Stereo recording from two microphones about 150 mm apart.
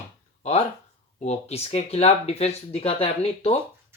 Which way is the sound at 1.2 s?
45° left (ahead or behind).